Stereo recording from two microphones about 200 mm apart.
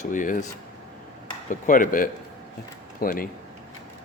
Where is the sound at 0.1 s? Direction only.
40° left (ahead or behind).